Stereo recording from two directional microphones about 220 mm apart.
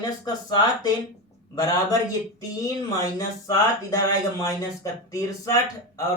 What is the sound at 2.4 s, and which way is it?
Speech, 15° left (ahead or behind).